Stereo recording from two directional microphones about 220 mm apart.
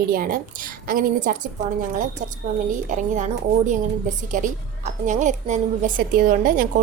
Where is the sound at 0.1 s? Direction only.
40° right (ahead or behind).